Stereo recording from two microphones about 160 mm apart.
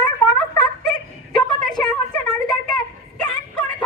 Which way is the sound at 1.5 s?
25° left (ahead or behind).